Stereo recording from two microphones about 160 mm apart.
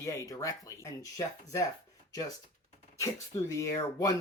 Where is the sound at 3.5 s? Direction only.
20° left (ahead or behind).